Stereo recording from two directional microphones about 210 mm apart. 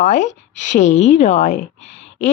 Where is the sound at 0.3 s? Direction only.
35° left (ahead or behind).